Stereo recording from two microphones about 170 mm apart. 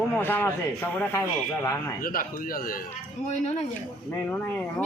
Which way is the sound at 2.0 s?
55° left (ahead or behind).